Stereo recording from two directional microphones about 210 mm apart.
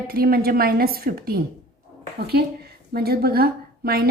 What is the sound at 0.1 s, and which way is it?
A woman's voice, 45° right (ahead or behind).